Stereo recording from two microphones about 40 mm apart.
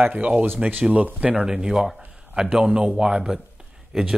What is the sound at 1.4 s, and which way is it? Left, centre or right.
Speech, centre.